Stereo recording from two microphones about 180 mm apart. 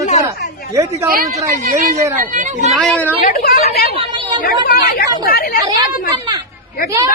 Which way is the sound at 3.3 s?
55° left (ahead or behind).